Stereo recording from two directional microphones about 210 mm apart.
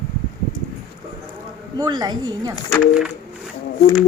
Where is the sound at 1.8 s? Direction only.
20° right (ahead or behind).